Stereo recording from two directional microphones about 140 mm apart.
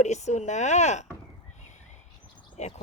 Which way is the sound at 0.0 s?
55° left (ahead or behind).